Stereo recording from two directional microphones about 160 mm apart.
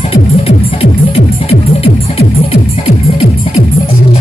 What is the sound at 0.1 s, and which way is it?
Music, 40° left (ahead or behind).